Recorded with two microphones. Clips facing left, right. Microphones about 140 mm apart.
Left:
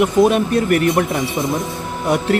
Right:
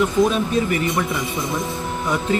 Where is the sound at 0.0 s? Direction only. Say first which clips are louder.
Left 4 dB; 65° left (ahead or behind).